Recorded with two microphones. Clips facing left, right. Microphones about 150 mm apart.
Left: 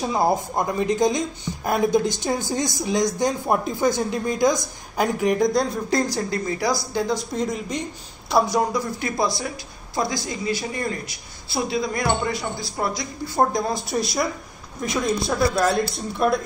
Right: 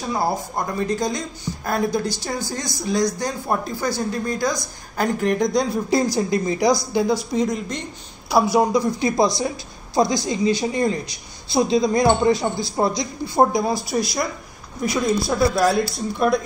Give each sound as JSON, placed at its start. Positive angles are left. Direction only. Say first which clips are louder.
{"t": 0.1, "sound": "a woman's voice", "louder": "even", "side_deg": 20}
{"t": 5.9, "sound": "speech", "louder": "right 3 dB", "side_deg": -10}
{"t": 7.3, "sound": "speech", "louder": "right 3 dB", "side_deg": 5}
{"t": 8.3, "sound": "speech", "louder": "right 2 dB", "side_deg": -5}
{"t": 8.5, "sound": "speech", "louder": "right 5 dB", "side_deg": -15}
{"t": 13.5, "sound": "speech", "louder": "right 3 dB", "side_deg": -5}